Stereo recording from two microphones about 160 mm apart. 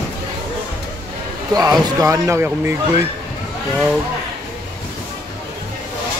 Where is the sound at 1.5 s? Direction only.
20° right (ahead or behind).